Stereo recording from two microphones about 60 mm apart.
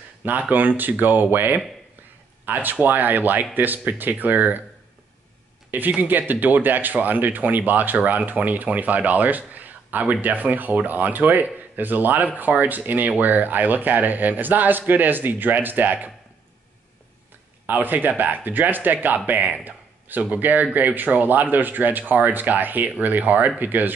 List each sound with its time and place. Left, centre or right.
0.2 s speech: right
5.7 s speech: right
17.6 s speech: right